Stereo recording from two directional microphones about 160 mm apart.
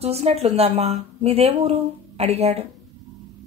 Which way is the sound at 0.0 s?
40° right (ahead or behind).